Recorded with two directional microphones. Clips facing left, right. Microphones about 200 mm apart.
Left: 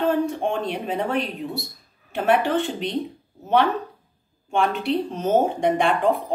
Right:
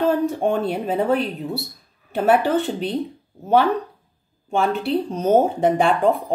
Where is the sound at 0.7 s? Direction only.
40° right (ahead or behind).